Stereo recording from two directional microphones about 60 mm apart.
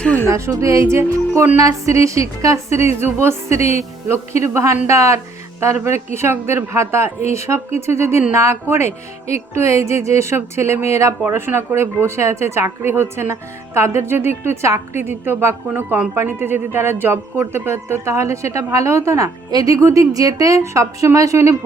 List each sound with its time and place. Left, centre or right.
0.3 s a woman's voice: right
9.2 s a woman's voice: right
20.6 s a woman's voice: right